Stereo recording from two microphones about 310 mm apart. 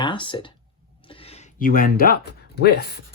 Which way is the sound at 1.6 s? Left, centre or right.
Left.